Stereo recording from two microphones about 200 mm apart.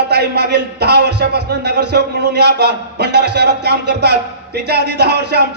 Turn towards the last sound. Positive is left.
turn(degrees=-55)  # may be behind; listen again after turning